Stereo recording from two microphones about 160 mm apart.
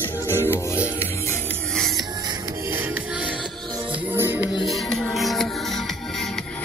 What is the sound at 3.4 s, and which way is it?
Music, 30° right (ahead or behind).